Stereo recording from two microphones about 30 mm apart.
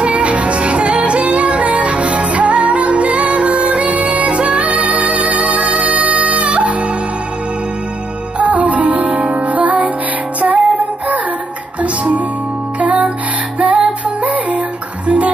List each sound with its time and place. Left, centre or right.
0.0 s music: right
8.4 s music: right
11.8 s music: right